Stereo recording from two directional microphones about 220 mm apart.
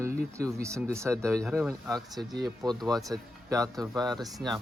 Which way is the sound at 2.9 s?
15° right (ahead or behind).